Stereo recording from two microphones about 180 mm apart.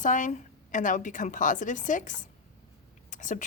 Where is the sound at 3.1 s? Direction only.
45° left (ahead or behind).